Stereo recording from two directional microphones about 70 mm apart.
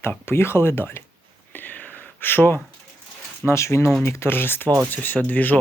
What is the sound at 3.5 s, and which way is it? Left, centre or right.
Speech, left.